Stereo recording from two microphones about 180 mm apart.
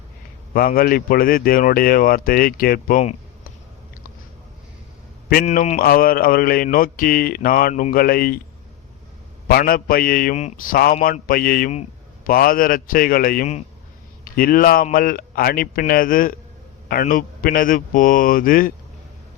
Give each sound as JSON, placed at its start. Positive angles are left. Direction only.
{"t": 0.5, "sound": "mantra", "side_deg": 55}
{"t": 5.3, "sound": "mantra", "side_deg": 50}
{"t": 9.5, "sound": "mantra", "side_deg": 55}
{"t": 14.3, "sound": "speech", "side_deg": 55}
{"t": 14.8, "sound": "mantra", "side_deg": 50}